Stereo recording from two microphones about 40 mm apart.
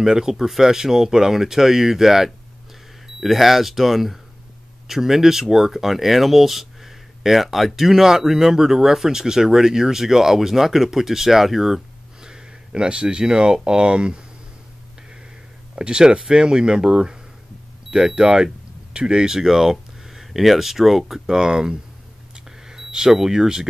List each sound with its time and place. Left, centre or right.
0.0 s speech: centre
15.7 s speech: right
21.3 s speech: centre
22.3 s a sound: centre